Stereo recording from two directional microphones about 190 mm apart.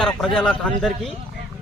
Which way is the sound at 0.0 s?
Centre (ahead or behind).